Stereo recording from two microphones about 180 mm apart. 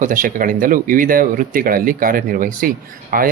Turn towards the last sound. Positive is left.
turn(degrees=-50)  # may be behind; listen again after turning